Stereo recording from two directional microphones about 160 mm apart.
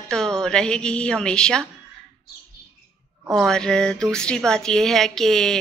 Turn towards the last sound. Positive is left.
turn(degrees=5)  # may be behind; listen again after turning